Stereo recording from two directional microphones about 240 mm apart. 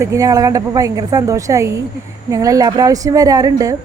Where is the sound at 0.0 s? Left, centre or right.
Centre.